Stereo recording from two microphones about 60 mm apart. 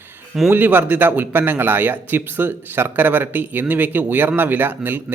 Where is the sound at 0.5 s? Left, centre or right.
Right.